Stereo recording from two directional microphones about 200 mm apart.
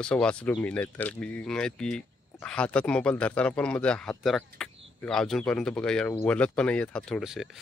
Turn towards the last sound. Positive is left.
turn(degrees=0)  # may be behind; listen again after turning